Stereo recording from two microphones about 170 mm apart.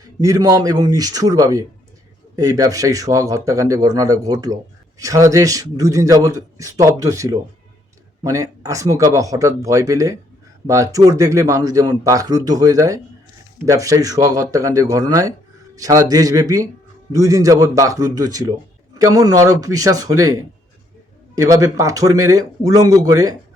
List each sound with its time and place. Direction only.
0.2 s a man's voice: 20° right (ahead or behind)